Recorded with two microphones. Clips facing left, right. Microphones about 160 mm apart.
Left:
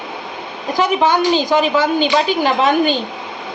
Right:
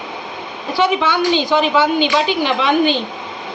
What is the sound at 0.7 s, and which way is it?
A woman's voice, 40° left (ahead or behind).